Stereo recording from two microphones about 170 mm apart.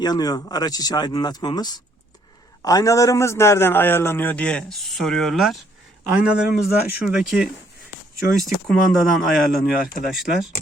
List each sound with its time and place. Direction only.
0.0 s a man's voice: 25° left (ahead or behind); by 10.5 s centre (ahead or behind)